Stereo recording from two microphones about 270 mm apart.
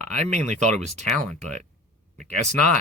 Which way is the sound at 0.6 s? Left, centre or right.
Right.